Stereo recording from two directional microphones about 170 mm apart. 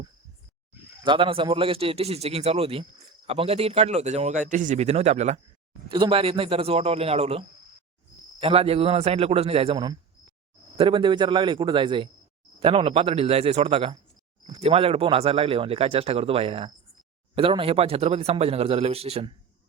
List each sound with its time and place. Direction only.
1.0 s speech: 30° right (ahead or behind)
5.9 s a man's voice: 30° right (ahead or behind)